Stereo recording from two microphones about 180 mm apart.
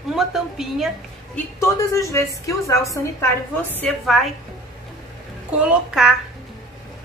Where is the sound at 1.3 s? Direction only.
15° left (ahead or behind).